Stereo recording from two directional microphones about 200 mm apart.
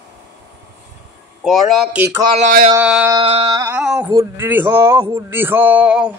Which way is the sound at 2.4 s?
45° right (ahead or behind).